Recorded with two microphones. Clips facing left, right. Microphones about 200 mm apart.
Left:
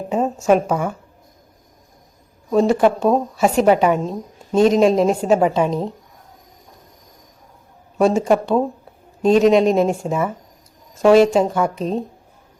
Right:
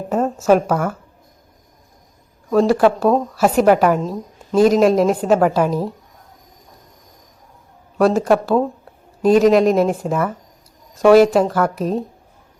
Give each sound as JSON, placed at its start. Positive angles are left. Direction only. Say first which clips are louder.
{"t": 0.2, "sound": "a sound", "louder": "right 1 dB", "side_deg": 5}
{"t": 0.7, "sound": "a woman's voice", "louder": "right 1 dB", "side_deg": 0}
{"t": 2.5, "sound": "a woman's voice", "louder": "right 1 dB", "side_deg": 0}
{"t": 3.9, "sound": "a woman's voice", "louder": "right 1 dB", "side_deg": 25}
{"t": 4.5, "sound": "a woman's voice", "louder": "right 1 dB", "side_deg": 0}
{"t": 7.9, "sound": "a woman's voice", "louder": "right 1 dB", "side_deg": 0}